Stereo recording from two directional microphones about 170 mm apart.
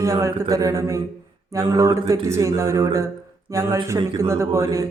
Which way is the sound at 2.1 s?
20° right (ahead or behind).